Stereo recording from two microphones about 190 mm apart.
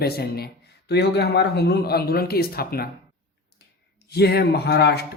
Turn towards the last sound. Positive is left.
turn(degrees=60)  # may be behind; listen again after turning